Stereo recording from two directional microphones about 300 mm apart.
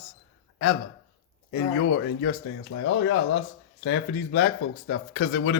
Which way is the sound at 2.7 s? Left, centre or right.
Left.